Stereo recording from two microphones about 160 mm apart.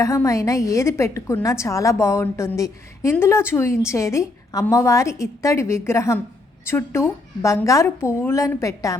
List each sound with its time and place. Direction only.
0.0 s a woman's voice: 20° left (ahead or behind)